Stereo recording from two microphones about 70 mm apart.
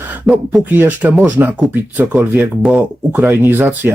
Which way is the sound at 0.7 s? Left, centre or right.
Right.